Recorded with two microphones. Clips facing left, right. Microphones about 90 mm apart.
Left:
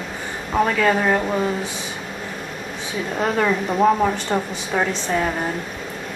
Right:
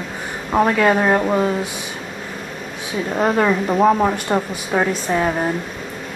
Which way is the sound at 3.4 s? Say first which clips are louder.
Right 1 dB; 15° right (ahead or behind).